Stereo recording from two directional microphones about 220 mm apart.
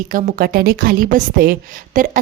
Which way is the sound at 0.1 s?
40° right (ahead or behind).